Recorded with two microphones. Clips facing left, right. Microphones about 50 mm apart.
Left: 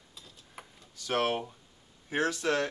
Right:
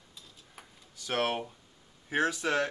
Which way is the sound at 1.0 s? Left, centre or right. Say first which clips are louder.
Left 1 dB; centre.